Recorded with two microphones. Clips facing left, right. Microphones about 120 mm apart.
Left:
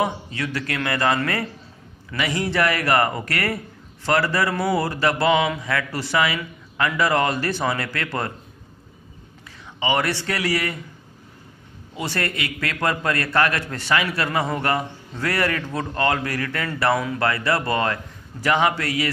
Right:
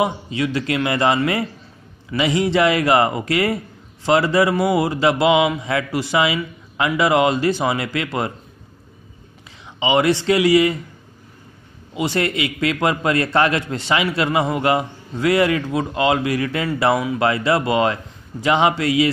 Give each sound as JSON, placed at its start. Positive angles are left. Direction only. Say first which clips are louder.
{"t": 0.0, "sound": "a man's voice", "louder": "right 4 dB", "side_deg": -15}
{"t": 9.8, "sound": "a man's voice", "louder": "right 6 dB", "side_deg": -20}
{"t": 11.9, "sound": "a man's voice", "louder": "right 6 dB", "side_deg": -20}